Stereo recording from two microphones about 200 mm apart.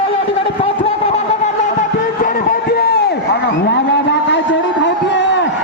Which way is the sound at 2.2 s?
50° left (ahead or behind).